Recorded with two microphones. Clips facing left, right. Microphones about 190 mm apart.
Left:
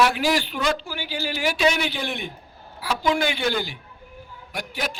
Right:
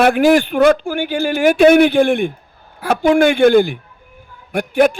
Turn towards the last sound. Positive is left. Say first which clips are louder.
# right 17 dB
turn(degrees=-55)  # may be behind; listen again after turning